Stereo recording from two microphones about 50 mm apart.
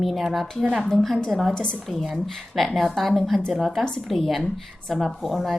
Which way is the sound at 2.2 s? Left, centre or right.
Centre.